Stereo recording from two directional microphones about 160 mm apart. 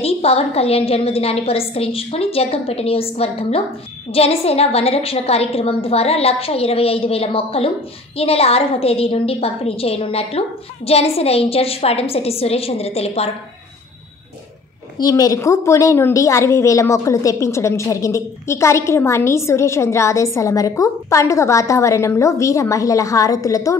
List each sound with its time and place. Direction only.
0.0 s a woman's voice: 40° left (ahead or behind)
15.0 s a woman's voice: 25° left (ahead or behind)